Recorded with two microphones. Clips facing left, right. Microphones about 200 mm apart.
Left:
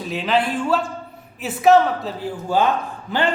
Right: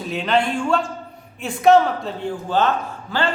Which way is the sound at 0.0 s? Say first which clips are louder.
Even; centre (ahead or behind).